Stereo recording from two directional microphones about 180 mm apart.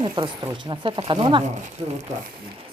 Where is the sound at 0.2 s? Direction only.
30° right (ahead or behind).